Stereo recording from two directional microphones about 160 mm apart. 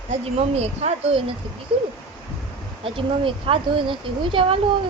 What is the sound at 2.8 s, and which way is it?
Speech, 35° right (ahead or behind).